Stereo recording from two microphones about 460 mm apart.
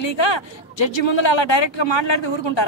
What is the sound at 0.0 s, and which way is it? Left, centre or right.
A man's voice, left.